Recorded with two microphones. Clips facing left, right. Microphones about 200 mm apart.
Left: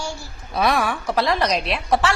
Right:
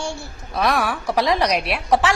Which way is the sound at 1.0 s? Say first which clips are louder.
Right 3 dB; 15° right (ahead or behind).